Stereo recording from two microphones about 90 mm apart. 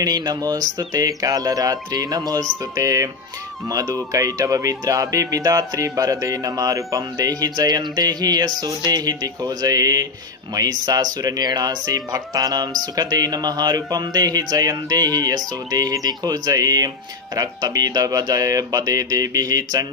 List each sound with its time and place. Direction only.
0.0 s speech: 50° right (ahead or behind)